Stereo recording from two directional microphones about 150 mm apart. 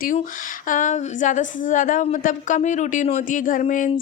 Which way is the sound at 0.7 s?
60° left (ahead or behind).